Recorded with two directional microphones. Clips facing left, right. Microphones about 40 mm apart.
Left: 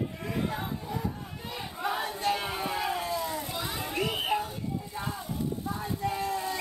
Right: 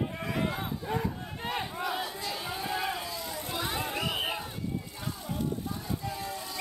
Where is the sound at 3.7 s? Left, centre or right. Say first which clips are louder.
Left 2 dB; right.